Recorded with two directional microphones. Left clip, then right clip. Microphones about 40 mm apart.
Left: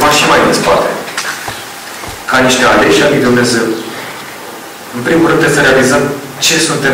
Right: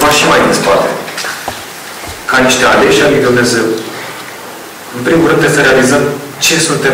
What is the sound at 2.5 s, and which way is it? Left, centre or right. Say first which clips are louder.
A man's voice: even; centre.